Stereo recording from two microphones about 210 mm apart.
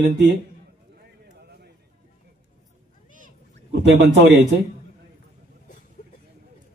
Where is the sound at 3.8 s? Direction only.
55° right (ahead or behind).